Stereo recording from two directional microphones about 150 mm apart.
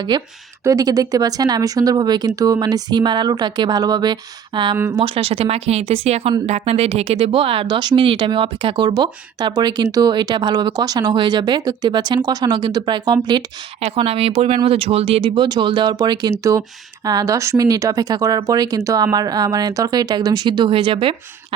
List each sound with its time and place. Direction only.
0.1 s speech: 30° right (ahead or behind)
13.8 s speech: 40° right (ahead or behind)